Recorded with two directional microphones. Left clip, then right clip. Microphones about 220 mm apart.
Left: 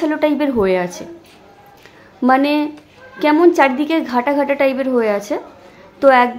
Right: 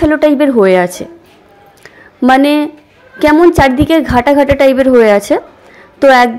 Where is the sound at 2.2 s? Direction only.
25° right (ahead or behind).